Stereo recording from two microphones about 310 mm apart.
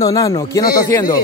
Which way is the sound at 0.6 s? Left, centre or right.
Left.